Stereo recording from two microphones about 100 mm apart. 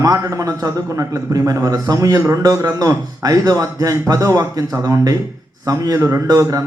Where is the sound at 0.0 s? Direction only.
35° right (ahead or behind).